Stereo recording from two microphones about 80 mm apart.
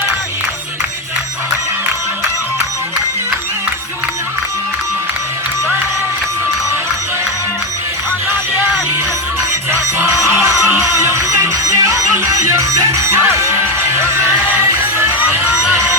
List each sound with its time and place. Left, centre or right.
10.2 s music: right
14.9 s music: right